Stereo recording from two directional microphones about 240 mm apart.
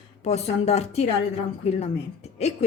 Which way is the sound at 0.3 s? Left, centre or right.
Left.